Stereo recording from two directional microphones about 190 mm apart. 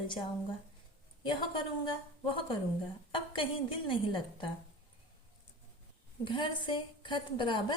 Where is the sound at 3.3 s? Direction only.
25° left (ahead or behind).